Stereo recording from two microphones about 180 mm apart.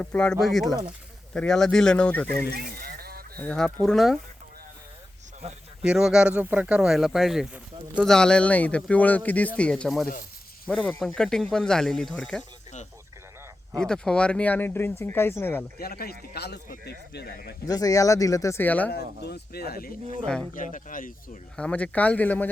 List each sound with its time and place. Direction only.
0.0 s speech: 5° left (ahead or behind)
2.5 s a sound: 60° right (ahead or behind)
3.3 s speech: 5° left (ahead or behind)
5.8 s speech: 5° right (ahead or behind)
13.7 s speech: 5° left (ahead or behind)
15.8 s speech: 60° left (ahead or behind)
17.7 s speech: 20° left (ahead or behind)
18.9 s speech: 65° left (ahead or behind)
20.2 s speech: 5° left (ahead or behind)
20.5 s speech: 45° left (ahead or behind)
21.5 s speech: 5° left (ahead or behind)